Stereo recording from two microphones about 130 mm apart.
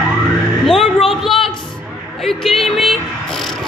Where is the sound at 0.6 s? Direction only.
Centre (ahead or behind).